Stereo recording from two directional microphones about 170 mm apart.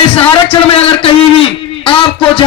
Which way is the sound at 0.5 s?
35° left (ahead or behind).